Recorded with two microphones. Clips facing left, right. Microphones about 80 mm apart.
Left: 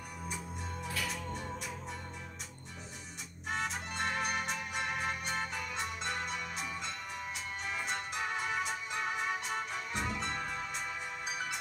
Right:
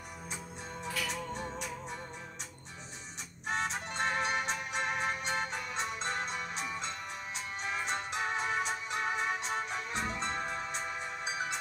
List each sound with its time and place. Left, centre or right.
1.0 s music: right
3.4 s music: right